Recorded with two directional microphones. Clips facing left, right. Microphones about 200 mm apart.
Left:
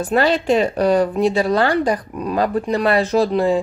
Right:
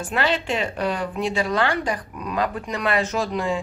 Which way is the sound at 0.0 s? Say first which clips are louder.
Left 7 dB; 40° left (ahead or behind).